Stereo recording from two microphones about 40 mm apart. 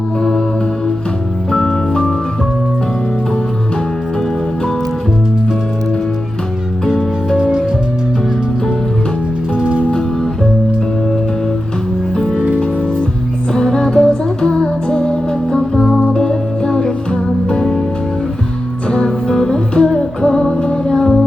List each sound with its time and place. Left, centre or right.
0.2 s music: centre
7.3 s music: centre
12.1 s music: centre
13.5 s music: centre
18.9 s music: centre